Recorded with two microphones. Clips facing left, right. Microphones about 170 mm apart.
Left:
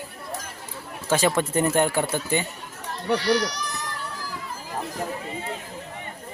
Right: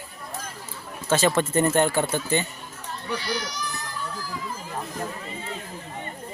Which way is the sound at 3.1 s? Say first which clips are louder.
Left 8 dB; 75° left (ahead or behind).